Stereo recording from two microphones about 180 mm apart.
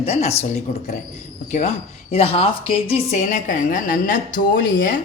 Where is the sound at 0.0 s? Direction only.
35° left (ahead or behind).